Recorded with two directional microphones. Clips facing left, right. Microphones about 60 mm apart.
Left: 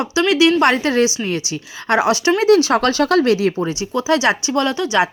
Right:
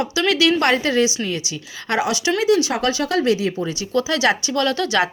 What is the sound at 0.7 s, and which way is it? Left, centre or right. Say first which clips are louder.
Speech: left 2 dB; left.